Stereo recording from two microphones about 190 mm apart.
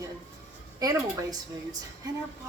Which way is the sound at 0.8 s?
20° right (ahead or behind).